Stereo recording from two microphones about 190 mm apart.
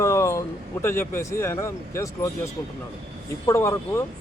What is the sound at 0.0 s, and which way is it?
Speech, 15° left (ahead or behind).